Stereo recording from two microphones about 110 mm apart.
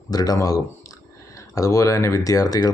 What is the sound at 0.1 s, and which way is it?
Speech, 35° left (ahead or behind).